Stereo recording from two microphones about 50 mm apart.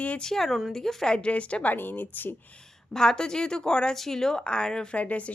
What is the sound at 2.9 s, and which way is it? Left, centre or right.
A woman's voice, centre.